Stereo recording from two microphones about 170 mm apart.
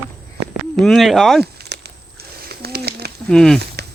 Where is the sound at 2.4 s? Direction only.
65° right (ahead or behind).